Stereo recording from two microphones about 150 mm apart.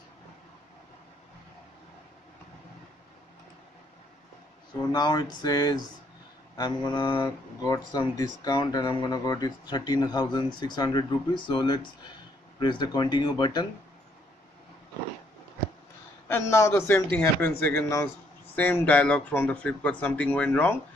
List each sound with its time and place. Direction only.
4.9 s speech: 25° left (ahead or behind)
16.3 s speech: 15° left (ahead or behind)